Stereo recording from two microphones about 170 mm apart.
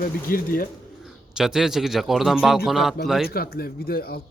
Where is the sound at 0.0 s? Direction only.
55° left (ahead or behind).